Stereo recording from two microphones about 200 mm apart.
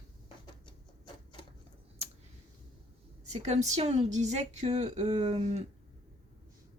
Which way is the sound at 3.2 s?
35° right (ahead or behind).